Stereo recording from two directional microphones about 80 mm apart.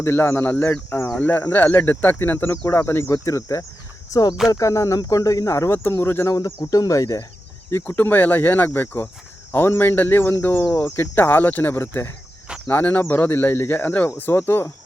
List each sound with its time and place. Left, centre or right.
0.0 s speech: left
1.1 s speech: centre; by 3.7 s left
4.1 s speech: left
4.4 s speech: left
6.3 s speech: left
7.7 s speech: left